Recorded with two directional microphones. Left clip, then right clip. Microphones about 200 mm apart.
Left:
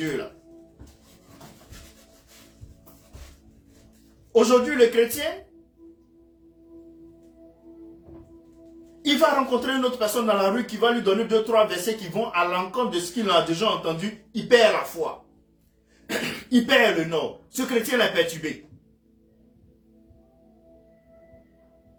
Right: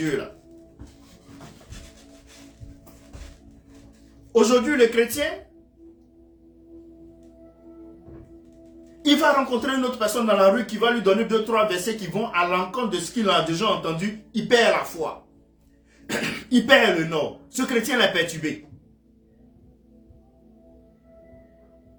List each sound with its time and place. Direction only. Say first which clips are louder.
4.3 s speech: even; 25° right (ahead or behind)
9.0 s speech: right 1 dB; 25° right (ahead or behind)